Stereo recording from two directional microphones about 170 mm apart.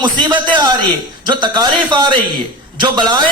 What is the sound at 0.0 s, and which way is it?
A man's voice, 25° right (ahead or behind).